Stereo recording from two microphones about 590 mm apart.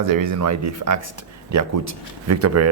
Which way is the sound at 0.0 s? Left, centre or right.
Right.